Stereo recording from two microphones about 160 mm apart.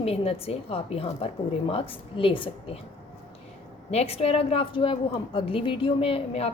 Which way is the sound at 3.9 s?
40° left (ahead or behind).